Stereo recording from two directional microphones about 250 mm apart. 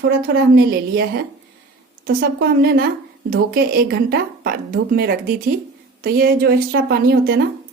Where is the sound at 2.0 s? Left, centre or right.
Right.